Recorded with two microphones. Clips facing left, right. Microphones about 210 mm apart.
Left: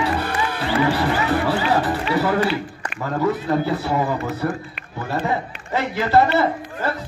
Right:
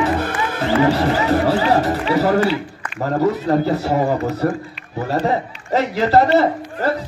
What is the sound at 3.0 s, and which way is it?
A man's voice, 40° right (ahead or behind).